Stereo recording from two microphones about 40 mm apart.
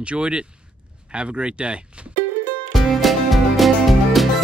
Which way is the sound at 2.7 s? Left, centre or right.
Centre.